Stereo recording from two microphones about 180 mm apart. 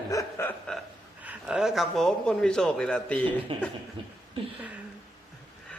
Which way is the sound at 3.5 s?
30° right (ahead or behind).